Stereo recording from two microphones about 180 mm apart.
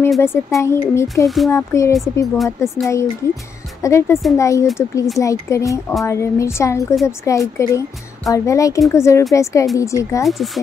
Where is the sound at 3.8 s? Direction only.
15° left (ahead or behind).